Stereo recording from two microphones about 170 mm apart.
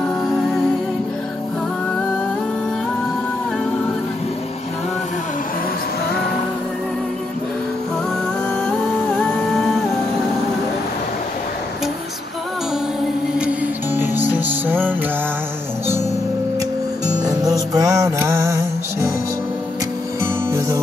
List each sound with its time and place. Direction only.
0.3 s music: centre (ahead or behind)
9.2 s music: 5° left (ahead or behind)
13.4 s music: 10° right (ahead or behind)
17.2 s music: 20° right (ahead or behind)
20.2 s music: 15° right (ahead or behind)